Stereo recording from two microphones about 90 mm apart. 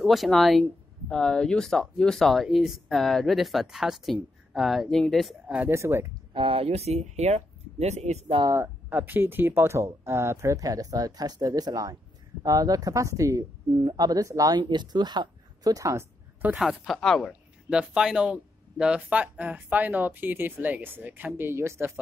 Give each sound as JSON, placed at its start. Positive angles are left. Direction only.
{"t": 0.0, "sound": "speech", "side_deg": 0}
{"t": 5.7, "sound": "speech", "side_deg": -30}
{"t": 6.3, "sound": "speech", "side_deg": -85}
{"t": 8.4, "sound": "speech", "side_deg": -70}
{"t": 8.9, "sound": "speech", "side_deg": -20}
{"t": 14.6, "sound": "speech", "side_deg": -55}
{"t": 16.5, "sound": "speech", "side_deg": 0}
{"t": 17.3, "sound": "speech", "side_deg": -10}